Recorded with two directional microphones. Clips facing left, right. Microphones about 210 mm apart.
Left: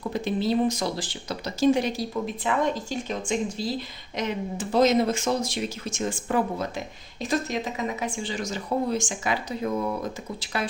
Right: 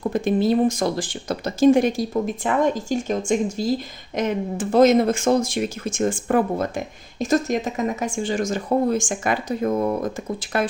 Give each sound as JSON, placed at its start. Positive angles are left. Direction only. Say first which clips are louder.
{"t": 0.1, "sound": "speech", "louder": "right 5 dB", "side_deg": -50}